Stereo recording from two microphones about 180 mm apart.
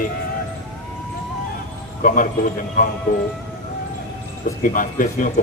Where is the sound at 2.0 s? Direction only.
50° left (ahead or behind).